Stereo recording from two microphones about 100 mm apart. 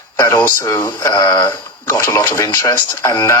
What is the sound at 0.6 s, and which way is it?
Speech, 35° left (ahead or behind).